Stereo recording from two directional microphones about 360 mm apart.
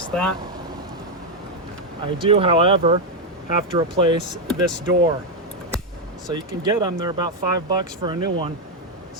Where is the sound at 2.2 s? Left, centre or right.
Centre.